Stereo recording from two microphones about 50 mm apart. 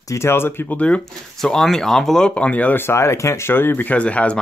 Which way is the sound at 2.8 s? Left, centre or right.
Left.